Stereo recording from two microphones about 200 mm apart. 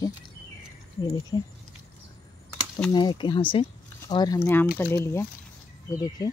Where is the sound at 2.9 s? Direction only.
20° left (ahead or behind).